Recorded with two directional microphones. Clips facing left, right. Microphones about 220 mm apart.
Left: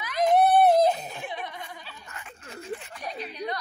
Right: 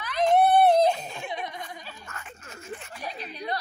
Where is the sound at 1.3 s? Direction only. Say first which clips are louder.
Right 2 dB; 15° right (ahead or behind).